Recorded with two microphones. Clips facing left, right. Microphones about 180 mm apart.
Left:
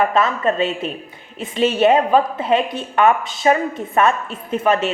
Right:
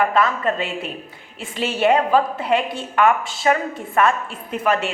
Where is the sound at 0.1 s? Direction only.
25° left (ahead or behind).